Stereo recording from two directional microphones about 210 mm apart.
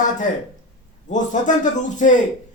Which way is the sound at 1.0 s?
35° left (ahead or behind).